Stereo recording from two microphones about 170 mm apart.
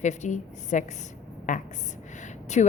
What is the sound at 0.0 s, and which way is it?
A woman's voice, 45° left (ahead or behind).